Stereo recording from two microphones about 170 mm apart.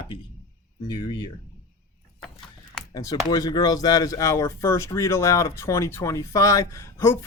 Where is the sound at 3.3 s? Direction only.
25° left (ahead or behind).